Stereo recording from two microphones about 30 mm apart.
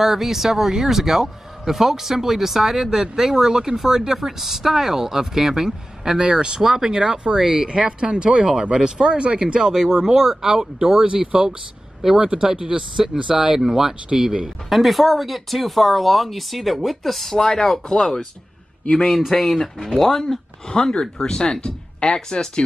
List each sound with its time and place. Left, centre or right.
0.0 s speech: centre
12.5 s speech: right
12.9 s speech: centre; by 18.2 s left
19.0 s speech: centre
20.6 s speech: left